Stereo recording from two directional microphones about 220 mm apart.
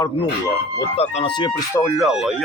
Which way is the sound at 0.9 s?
30° left (ahead or behind).